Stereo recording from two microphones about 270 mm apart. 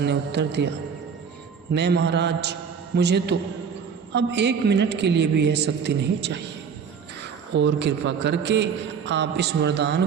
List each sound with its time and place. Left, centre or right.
0.0 s a man's voice: right
1.7 s a man's voice: right
7.5 s a man's voice: right